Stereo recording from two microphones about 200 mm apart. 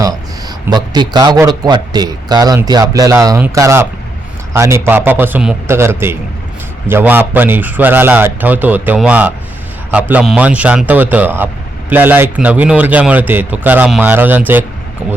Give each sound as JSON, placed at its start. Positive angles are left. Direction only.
{"t": 0.7, "sound": "a man's voice", "side_deg": -20}